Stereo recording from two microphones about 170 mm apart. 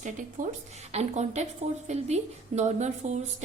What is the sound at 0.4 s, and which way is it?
Speech, 50° right (ahead or behind).